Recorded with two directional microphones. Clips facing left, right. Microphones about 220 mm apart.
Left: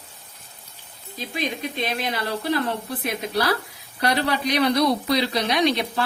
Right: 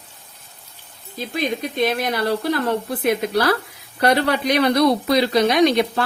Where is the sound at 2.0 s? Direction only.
45° right (ahead or behind).